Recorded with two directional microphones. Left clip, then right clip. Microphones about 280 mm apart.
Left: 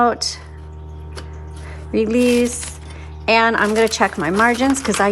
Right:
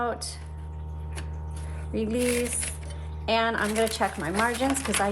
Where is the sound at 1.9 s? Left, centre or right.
Left.